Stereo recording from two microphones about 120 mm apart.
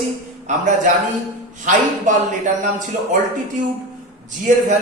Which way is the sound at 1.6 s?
90° right.